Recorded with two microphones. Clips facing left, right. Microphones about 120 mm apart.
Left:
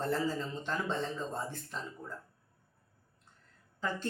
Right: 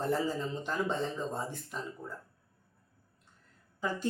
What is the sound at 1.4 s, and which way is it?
Speech, 15° right (ahead or behind).